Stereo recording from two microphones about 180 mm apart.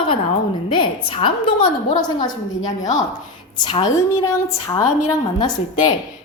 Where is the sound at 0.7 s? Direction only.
30° left (ahead or behind).